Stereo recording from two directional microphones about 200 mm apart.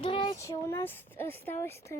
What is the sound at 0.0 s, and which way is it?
Speech, 25° left (ahead or behind).